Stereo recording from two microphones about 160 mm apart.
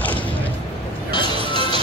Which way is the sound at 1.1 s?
30° left (ahead or behind).